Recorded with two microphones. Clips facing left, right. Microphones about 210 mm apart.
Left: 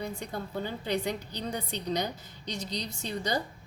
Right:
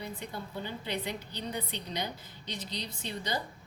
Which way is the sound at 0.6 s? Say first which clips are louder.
Left 5 dB; 45° left (ahead or behind).